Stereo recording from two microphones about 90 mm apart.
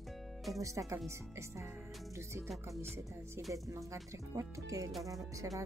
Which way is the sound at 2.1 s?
30° right (ahead or behind).